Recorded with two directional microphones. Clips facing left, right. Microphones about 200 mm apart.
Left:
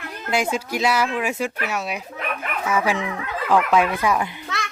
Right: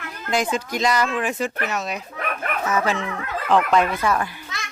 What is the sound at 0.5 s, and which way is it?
A child's voice, 5° left (ahead or behind).